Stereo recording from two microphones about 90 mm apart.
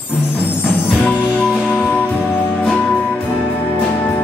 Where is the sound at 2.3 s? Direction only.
20° left (ahead or behind).